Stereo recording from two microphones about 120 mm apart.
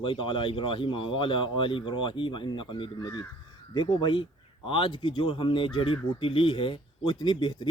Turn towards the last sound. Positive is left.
turn(degrees=40)  # may be behind; listen again after turning